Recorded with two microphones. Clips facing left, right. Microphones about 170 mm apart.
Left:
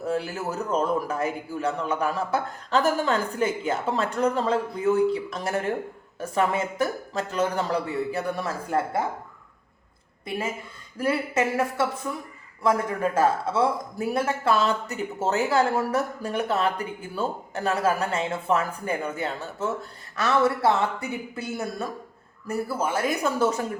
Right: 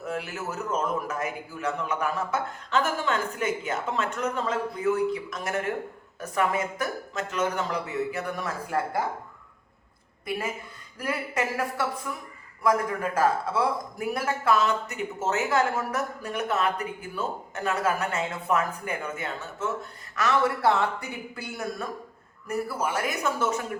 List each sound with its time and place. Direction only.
0.0 s a man's voice: 30° left (ahead or behind)
10.2 s a man's voice: 25° left (ahead or behind)